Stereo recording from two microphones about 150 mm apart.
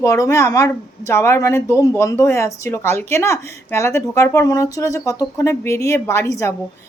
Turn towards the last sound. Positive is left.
turn(degrees=20)  # may be behind; listen again after turning